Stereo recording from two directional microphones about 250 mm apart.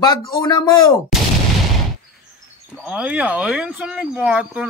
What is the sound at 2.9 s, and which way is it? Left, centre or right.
Speech, centre.